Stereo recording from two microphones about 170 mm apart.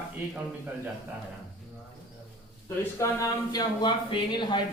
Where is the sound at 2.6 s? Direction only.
20° left (ahead or behind).